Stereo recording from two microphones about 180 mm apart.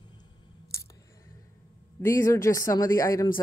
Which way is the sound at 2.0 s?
15° left (ahead or behind).